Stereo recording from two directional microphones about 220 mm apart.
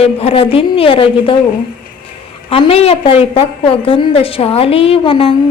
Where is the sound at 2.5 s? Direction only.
25° left (ahead or behind).